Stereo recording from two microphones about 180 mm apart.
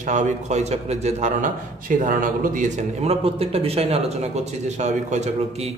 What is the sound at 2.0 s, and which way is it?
A man's voice, 50° right (ahead or behind).